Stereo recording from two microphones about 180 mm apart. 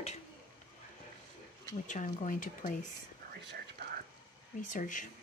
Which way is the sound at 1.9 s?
45° left (ahead or behind).